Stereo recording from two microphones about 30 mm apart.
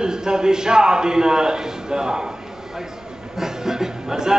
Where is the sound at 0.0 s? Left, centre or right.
Right.